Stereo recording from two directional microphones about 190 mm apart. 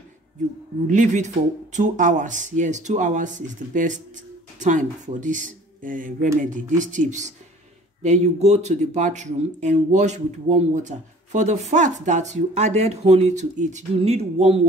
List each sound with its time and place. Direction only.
0.8 s speech: 40° right (ahead or behind)